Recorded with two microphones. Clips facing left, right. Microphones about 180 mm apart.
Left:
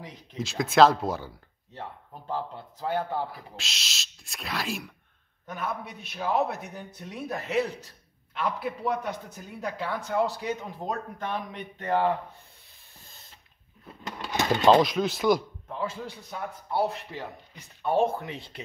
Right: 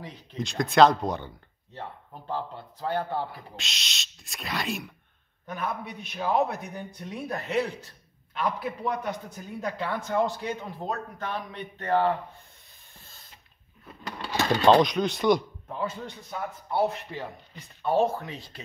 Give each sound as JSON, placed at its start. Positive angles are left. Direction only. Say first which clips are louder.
{"t": 0.0, "sound": "a man's voice", "louder": "right 1 dB", "side_deg": 10}
{"t": 14.0, "sound": "sewing machine", "louder": "even", "side_deg": 20}
{"t": 14.5, "sound": "a man's voice", "louder": "even", "side_deg": 0}
{"t": 17.8, "sound": "speech", "louder": "even", "side_deg": 15}